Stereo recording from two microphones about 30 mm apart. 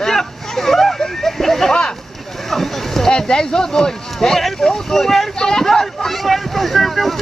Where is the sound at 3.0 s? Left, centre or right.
Left.